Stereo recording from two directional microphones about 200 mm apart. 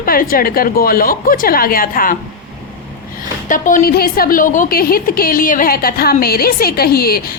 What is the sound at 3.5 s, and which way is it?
A woman's voice, 40° left (ahead or behind).